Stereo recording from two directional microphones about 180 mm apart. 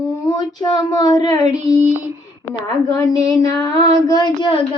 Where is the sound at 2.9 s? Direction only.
20° left (ahead or behind).